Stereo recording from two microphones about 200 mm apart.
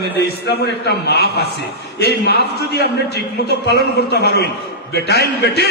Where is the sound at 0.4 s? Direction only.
55° left (ahead or behind).